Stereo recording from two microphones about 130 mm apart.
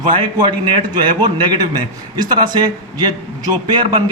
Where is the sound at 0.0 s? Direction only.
35° right (ahead or behind).